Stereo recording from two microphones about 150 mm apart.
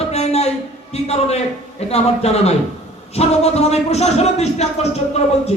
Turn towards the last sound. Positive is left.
turn(degrees=45)  # may be behind; listen again after turning